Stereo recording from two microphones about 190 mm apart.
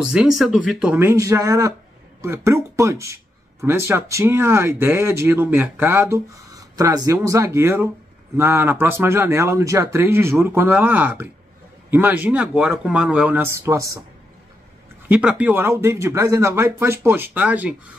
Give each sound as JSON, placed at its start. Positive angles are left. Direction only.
{"t": 0.0, "sound": "speech", "side_deg": -5}
{"t": 15.0, "sound": "speech", "side_deg": -5}